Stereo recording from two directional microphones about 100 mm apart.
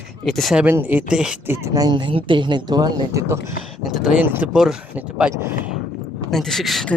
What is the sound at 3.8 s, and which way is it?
Speech, 5° right (ahead or behind).